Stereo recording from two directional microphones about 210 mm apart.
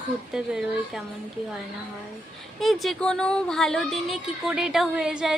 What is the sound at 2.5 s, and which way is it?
A woman's voice, centre (ahead or behind).